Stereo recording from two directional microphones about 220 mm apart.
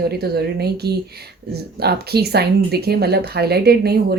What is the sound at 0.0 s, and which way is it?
Speech, 45° right (ahead or behind).